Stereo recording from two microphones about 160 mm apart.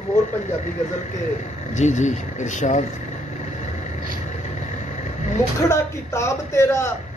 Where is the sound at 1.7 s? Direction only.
50° left (ahead or behind).